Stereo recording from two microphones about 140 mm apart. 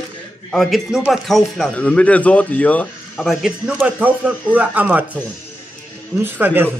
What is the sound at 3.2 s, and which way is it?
Speech, 5° right (ahead or behind).